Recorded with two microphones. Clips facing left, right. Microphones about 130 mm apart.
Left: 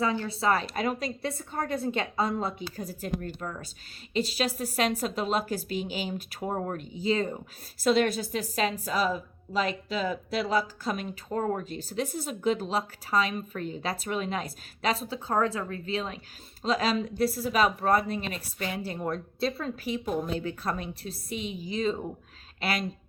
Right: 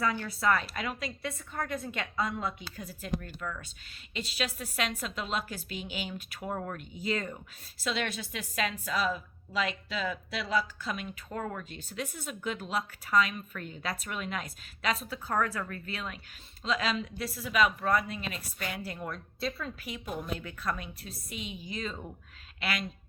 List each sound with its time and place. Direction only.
0.0 s a woman's voice: 25° left (ahead or behind)